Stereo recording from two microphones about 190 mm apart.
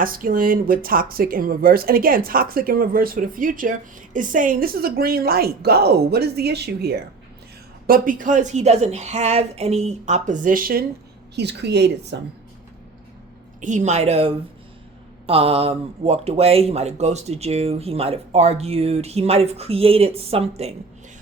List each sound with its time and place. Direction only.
0.0 s speech: 45° right (ahead or behind)
11.3 s a woman's voice: 65° right (ahead or behind)
13.6 s speech: 40° right (ahead or behind)